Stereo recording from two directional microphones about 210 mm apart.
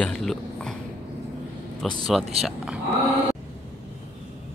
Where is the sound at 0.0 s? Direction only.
5° left (ahead or behind).